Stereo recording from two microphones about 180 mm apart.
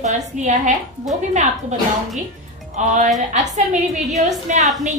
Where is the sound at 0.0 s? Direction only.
40° right (ahead or behind).